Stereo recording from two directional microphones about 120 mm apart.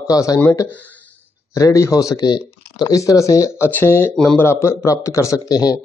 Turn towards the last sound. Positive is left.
turn(degrees=35)  # may be behind; listen again after turning